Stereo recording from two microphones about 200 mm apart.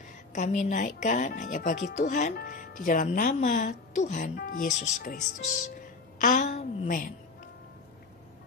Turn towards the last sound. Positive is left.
turn(degrees=40)  # may be behind; listen again after turning